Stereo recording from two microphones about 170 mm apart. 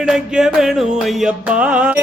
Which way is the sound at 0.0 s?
5° right (ahead or behind).